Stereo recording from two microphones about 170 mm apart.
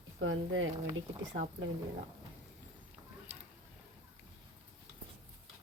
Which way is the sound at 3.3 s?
10° right (ahead or behind).